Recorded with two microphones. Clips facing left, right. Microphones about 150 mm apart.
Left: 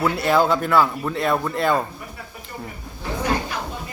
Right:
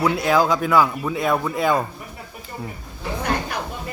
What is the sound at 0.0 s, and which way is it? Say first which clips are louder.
Speech: even; centre (ahead or behind).